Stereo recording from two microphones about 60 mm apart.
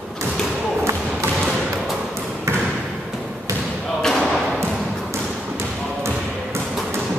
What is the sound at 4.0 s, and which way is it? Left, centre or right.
Thump, centre.